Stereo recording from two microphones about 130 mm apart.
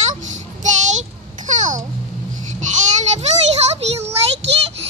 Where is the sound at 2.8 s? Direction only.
60° right (ahead or behind).